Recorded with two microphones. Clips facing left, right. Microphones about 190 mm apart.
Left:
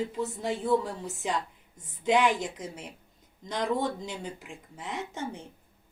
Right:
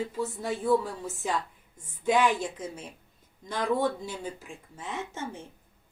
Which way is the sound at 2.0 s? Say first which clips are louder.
Even; 20° left (ahead or behind).